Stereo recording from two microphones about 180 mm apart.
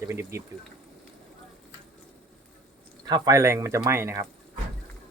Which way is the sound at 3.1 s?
20° right (ahead or behind).